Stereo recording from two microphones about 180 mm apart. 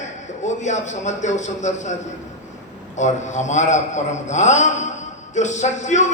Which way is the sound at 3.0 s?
40° left (ahead or behind).